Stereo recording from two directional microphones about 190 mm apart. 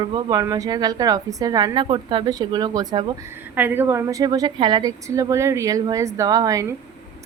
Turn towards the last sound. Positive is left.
turn(degrees=-15)  # may be behind; listen again after turning